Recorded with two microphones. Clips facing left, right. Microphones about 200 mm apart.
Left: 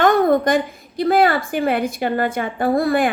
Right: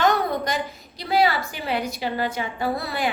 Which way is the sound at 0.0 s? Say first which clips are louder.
Left 7 dB; 50° left (ahead or behind).